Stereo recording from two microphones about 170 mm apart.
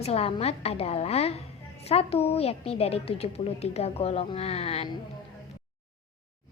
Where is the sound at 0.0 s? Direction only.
35° left (ahead or behind).